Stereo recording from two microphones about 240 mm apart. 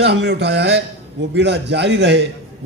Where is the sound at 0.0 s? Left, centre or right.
Right.